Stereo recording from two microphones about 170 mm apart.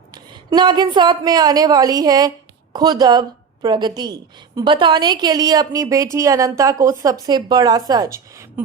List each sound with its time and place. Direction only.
0.1 s a woman's voice: 25° right (ahead or behind)